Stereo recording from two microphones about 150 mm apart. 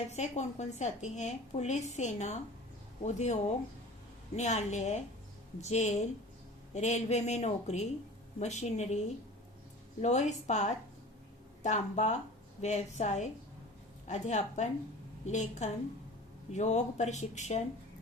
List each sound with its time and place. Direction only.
0.1 s a woman's voice: 50° left (ahead or behind)
4.4 s a woman's voice: 50° left (ahead or behind)
10.0 s a woman's voice: 50° left (ahead or behind)